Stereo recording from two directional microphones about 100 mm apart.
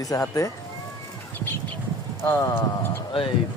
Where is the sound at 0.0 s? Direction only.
35° left (ahead or behind).